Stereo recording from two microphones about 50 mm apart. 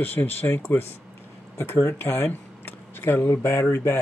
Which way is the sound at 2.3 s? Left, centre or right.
Left.